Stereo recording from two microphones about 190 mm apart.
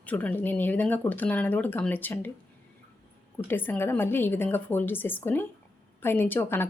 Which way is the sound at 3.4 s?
10° left (ahead or behind).